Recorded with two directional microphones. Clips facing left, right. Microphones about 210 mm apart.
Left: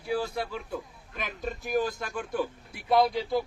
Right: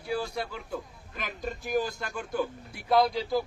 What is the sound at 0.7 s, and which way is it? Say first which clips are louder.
A man's voice: even; centre (ahead or behind).